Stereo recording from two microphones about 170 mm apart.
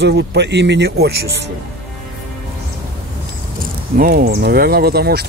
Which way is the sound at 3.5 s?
60° right (ahead or behind).